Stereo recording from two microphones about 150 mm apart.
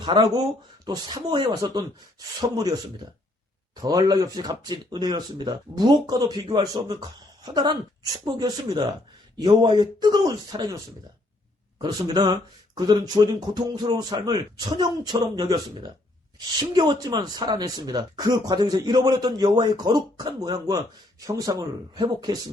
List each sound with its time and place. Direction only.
0.0 s speech: 30° right (ahead or behind)
3.8 s speech: 25° right (ahead or behind)
11.8 s speech: 30° right (ahead or behind)